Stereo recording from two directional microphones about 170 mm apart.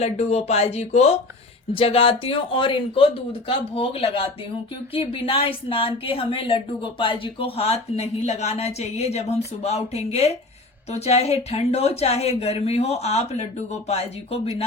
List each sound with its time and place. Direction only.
0.0 s speech: 40° left (ahead or behind)